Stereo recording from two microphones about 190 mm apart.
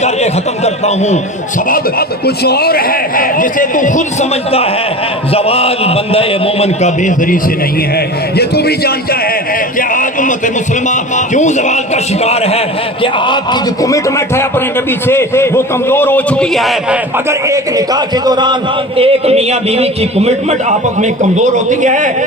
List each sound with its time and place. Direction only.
0.0 s a man's voice: 35° left (ahead or behind)
1.7 s a man's voice: 55° left (ahead or behind)
7.9 s a man's voice: 55° left (ahead or behind)
9.7 s a sound: 45° left (ahead or behind)
12.2 s a man's voice: 35° left (ahead or behind); by 17.0 s centre (ahead or behind)
17.2 s a man's voice: 15° right (ahead or behind); by 22.1 s 40° right (ahead or behind)